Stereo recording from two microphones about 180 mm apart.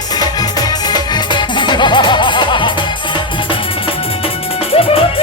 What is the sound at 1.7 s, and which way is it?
Music, 25° left (ahead or behind).